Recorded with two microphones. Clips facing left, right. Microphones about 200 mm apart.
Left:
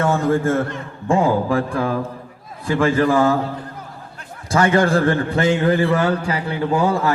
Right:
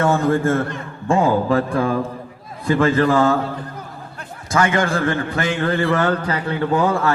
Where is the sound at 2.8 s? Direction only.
10° left (ahead or behind).